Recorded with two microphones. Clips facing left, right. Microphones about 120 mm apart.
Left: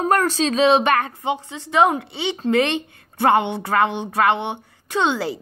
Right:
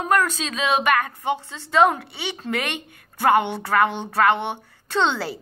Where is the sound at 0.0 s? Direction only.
35° left (ahead or behind).